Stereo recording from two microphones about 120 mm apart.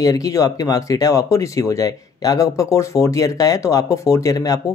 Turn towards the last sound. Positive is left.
turn(degrees=30)  # may be behind; listen again after turning